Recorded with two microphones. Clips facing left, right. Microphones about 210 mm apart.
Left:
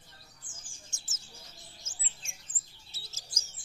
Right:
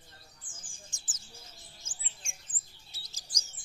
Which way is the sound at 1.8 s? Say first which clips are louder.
Left 1 dB; 30° right (ahead or behind).